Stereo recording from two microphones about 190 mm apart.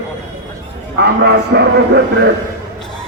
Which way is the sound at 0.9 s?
60° right (ahead or behind).